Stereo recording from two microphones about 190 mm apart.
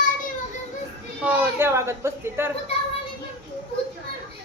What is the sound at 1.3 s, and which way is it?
A child's voice, 10° right (ahead or behind).